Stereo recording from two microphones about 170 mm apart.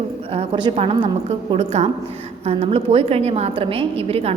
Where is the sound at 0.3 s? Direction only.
30° right (ahead or behind).